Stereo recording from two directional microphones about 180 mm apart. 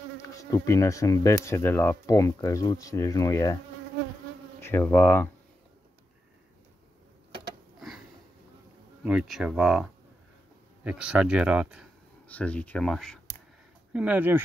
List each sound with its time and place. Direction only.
0.2 s speech: 15° left (ahead or behind)
4.6 s insect: 10° left (ahead or behind)
9.0 s speech: 5° right (ahead or behind)
12.3 s speech: 10° left (ahead or behind)
13.9 s speech: 10° right (ahead or behind)